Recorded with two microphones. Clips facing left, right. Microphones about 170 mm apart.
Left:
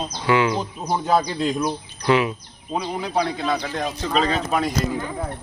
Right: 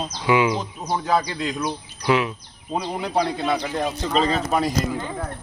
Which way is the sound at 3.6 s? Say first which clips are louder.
Right 2 dB; 15° right (ahead or behind).